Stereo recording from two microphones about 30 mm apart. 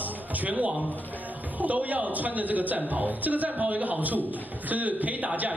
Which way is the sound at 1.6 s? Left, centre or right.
Right.